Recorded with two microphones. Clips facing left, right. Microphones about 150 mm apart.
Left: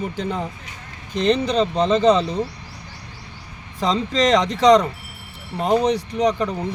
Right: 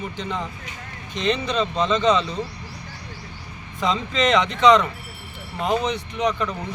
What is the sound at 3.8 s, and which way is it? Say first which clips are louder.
Speech: left 3 dB; 35° left (ahead or behind).